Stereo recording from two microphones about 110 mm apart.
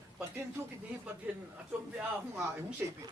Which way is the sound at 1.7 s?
10° right (ahead or behind).